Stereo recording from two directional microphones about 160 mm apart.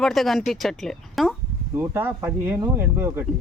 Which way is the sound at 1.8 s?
15° right (ahead or behind).